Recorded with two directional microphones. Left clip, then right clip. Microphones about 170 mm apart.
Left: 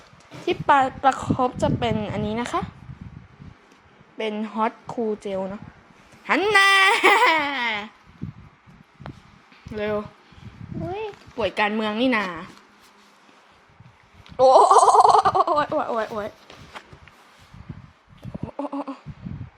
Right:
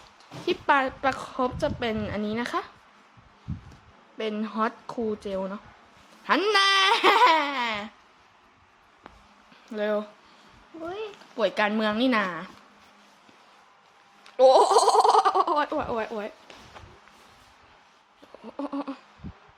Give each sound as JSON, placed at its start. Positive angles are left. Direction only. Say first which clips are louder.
{"t": 0.4, "sound": "a woman's voice", "louder": "left 5 dB", "side_deg": 5}
{"t": 4.2, "sound": "a woman's voice", "louder": "left 3 dB", "side_deg": 5}
{"t": 7.3, "sound": "speech", "louder": "left 2 dB", "side_deg": 0}
{"t": 9.0, "sound": "a sound", "louder": "left 7 dB", "side_deg": 65}
{"t": 9.7, "sound": "speech", "louder": "left 1 dB", "side_deg": -5}
{"t": 11.3, "sound": "speech", "louder": "left 2 dB", "side_deg": -5}
{"t": 14.3, "sound": "speech", "louder": "left 4 dB", "side_deg": 0}
{"t": 16.8, "sound": "a sound", "louder": "left 6 dB", "side_deg": 75}
{"t": 18.5, "sound": "a sound", "louder": "left 3 dB", "side_deg": -5}